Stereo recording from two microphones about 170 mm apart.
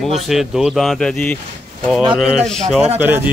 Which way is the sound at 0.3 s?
Centre (ahead or behind).